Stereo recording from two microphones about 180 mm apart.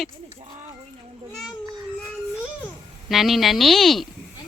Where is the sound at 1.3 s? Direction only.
Centre (ahead or behind).